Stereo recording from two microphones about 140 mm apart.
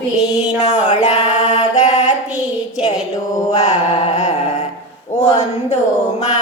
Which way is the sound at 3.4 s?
55° left (ahead or behind).